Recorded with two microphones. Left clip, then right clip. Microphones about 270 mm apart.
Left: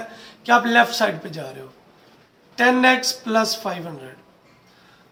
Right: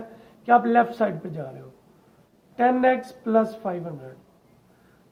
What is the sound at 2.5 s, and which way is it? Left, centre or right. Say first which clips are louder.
A man's voice: left 4 dB; right.